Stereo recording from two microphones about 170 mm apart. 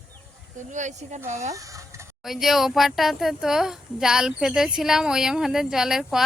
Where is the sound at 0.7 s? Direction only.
45° right (ahead or behind).